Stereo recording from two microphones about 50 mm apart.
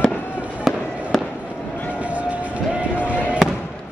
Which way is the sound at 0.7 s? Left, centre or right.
Centre.